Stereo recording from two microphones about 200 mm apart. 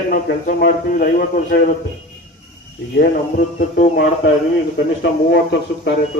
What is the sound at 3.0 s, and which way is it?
Music, 45° left (ahead or behind).